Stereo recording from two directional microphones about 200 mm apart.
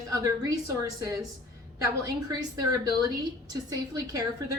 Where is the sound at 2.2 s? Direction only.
20° right (ahead or behind).